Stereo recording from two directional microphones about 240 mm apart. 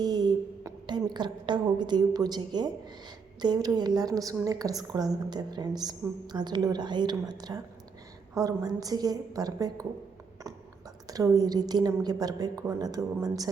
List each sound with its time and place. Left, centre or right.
0.0 s a woman's voice: centre
11.1 s a woman's voice: centre